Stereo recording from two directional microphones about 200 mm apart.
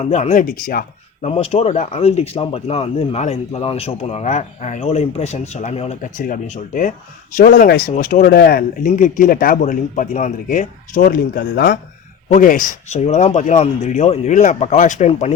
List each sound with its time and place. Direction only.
0.0 s speech: 35° left (ahead or behind)
1.3 s speech: 30° left (ahead or behind); by 11.8 s 60° left (ahead or behind)
12.3 s speech: 40° left (ahead or behind)